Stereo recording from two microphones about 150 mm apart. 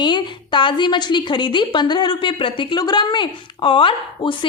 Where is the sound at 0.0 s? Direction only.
30° left (ahead or behind).